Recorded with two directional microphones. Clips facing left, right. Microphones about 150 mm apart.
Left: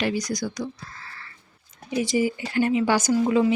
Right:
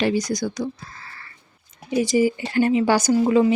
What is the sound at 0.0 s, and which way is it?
Speech, 25° right (ahead or behind).